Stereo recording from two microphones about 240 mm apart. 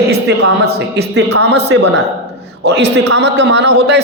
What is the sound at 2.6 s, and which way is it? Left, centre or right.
A man's voice, right.